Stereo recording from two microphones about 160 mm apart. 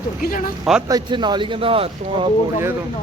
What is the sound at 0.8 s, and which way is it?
Speech, 25° right (ahead or behind).